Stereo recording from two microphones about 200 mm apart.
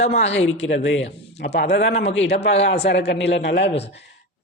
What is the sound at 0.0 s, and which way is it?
Speech, 35° left (ahead or behind).